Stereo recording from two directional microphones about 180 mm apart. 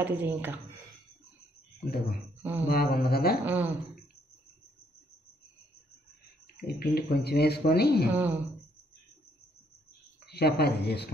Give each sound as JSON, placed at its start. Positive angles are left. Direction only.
{"t": 0.0, "sound": "speech", "side_deg": -10}
{"t": 1.9, "sound": "speech", "side_deg": 60}
{"t": 3.4, "sound": "speech", "side_deg": -10}
{"t": 6.6, "sound": "speech", "side_deg": 60}
{"t": 8.1, "sound": "speech", "side_deg": -10}
{"t": 10.2, "sound": "speech", "side_deg": 65}